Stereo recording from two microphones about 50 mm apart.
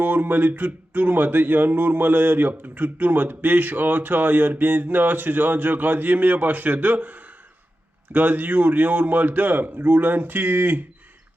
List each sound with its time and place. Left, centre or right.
0.0 s speech: right